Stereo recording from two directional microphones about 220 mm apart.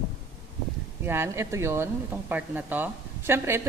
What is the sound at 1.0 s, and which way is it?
A woman's voice, 10° right (ahead or behind).